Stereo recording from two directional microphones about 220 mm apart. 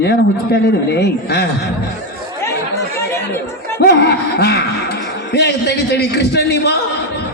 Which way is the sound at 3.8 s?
50° left (ahead or behind).